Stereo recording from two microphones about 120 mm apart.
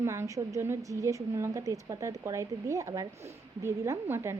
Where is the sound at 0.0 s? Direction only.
25° right (ahead or behind).